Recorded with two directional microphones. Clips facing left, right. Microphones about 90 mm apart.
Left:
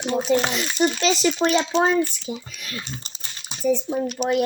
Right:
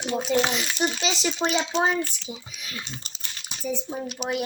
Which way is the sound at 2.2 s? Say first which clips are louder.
Left 6 dB; 60° left (ahead or behind).